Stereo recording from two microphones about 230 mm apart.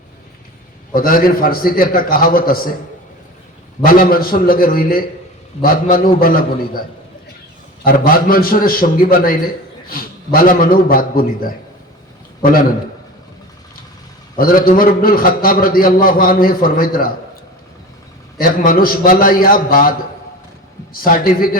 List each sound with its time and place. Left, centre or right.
0.9 s a man's voice: left
3.8 s a man's voice: left
7.9 s a man's voice: left
14.3 s a man's voice: left
18.3 s a man's voice: left
20.9 s a man's voice: left